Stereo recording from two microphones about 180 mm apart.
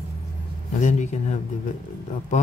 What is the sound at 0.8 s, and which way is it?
Speech, 40° left (ahead or behind).